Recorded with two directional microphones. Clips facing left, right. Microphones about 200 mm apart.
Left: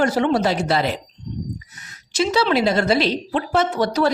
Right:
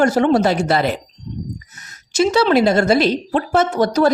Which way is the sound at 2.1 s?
50° right (ahead or behind).